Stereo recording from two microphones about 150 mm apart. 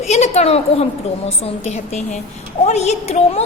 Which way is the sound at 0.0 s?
45° left (ahead or behind).